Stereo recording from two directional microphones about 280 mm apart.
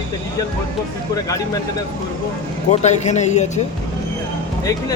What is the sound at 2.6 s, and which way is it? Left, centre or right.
Speech, left.